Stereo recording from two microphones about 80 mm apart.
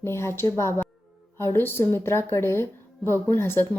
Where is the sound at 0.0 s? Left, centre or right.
Left.